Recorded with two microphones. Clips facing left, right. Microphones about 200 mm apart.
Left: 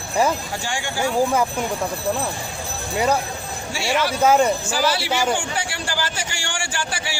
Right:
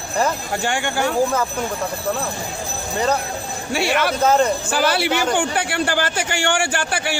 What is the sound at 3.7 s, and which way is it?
Speech, 60° right (ahead or behind).